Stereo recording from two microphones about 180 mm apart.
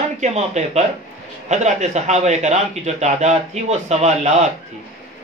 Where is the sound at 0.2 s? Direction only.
40° right (ahead or behind).